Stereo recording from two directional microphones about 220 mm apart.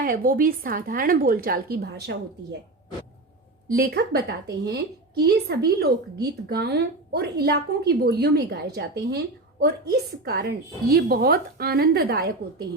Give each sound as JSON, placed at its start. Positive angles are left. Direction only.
{"t": 0.0, "sound": "a woman's voice", "side_deg": -40}
{"t": 3.7, "sound": "a woman's voice", "side_deg": -45}